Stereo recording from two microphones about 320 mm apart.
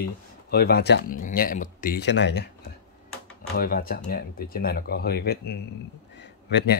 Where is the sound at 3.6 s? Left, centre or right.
Left.